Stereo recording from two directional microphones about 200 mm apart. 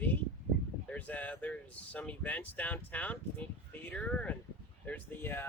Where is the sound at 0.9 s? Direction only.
5° left (ahead or behind).